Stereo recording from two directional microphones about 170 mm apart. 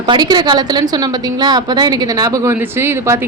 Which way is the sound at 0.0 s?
25° right (ahead or behind).